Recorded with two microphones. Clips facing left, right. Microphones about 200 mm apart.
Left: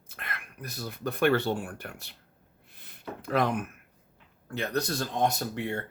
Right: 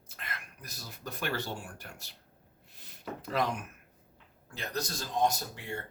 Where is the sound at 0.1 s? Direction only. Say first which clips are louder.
Left 3 dB; 60° left (ahead or behind).